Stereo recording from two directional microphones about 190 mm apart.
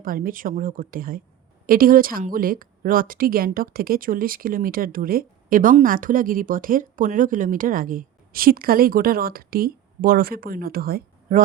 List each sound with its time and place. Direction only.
0.0 s a woman's voice: 50° right (ahead or behind)